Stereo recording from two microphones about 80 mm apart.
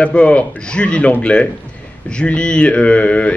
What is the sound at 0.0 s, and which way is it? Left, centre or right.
A man's voice, centre.